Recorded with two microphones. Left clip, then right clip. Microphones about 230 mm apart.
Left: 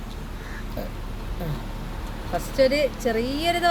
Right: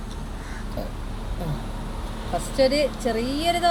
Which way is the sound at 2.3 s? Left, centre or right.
Centre.